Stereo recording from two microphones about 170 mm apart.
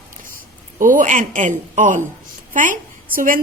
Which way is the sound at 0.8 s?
50° right (ahead or behind).